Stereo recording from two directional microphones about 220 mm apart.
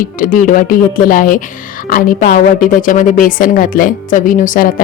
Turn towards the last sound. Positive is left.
turn(degrees=40)  # may be behind; listen again after turning